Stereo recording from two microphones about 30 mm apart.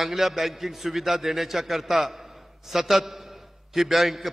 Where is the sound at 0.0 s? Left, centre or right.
Centre.